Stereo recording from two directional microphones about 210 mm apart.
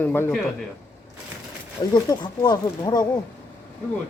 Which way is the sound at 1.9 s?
20° left (ahead or behind).